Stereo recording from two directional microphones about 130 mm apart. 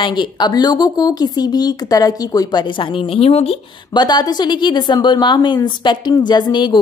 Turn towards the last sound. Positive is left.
turn(degrees=35)  # may be behind; listen again after turning